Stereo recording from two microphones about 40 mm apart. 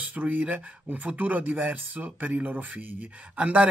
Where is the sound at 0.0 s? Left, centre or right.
Right.